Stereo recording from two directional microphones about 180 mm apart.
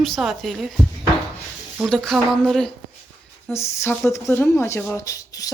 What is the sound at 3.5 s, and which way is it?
A child's voice, 15° left (ahead or behind).